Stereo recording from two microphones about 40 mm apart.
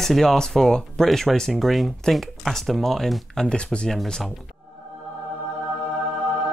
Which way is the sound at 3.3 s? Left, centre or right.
Left.